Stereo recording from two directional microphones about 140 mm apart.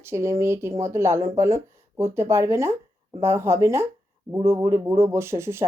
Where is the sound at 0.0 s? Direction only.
20° right (ahead or behind).